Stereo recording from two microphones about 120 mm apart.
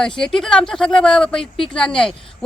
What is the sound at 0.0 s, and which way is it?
A woman's voice, 5° left (ahead or behind).